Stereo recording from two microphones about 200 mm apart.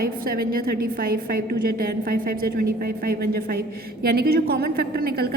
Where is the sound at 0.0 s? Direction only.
50° right (ahead or behind).